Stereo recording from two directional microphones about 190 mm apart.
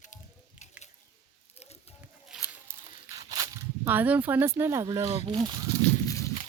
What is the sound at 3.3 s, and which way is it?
Speech, 15° right (ahead or behind).